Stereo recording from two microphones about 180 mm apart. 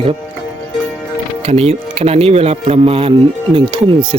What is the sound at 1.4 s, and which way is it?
Speech, 35° right (ahead or behind).